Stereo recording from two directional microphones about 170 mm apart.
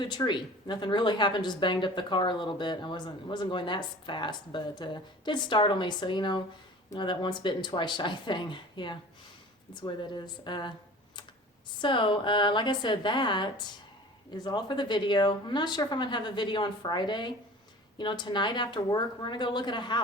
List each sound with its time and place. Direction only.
0.0 s speech: 25° left (ahead or behind)
11.8 s speech: 30° left (ahead or behind)